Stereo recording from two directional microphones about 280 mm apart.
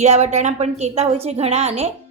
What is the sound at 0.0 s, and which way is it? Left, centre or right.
A woman's voice, right.